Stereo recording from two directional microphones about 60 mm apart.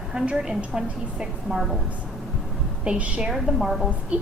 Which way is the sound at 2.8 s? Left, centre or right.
Centre.